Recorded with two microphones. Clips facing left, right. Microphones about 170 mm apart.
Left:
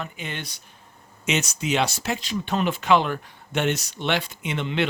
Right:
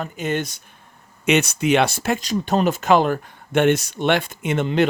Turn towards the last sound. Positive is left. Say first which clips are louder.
# right 6 dB
turn(degrees=-45)  # may be behind; listen again after turning